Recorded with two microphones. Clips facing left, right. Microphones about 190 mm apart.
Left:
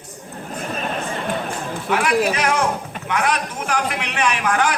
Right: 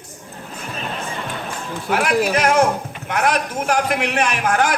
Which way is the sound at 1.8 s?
50° right (ahead or behind).